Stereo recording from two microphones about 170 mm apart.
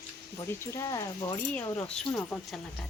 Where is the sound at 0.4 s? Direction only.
15° left (ahead or behind).